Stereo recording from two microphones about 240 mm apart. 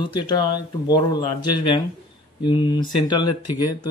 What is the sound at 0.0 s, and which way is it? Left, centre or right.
Speech, centre.